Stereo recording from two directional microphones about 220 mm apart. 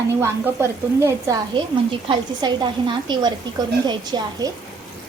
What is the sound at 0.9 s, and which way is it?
A woman's voice, 15° right (ahead or behind).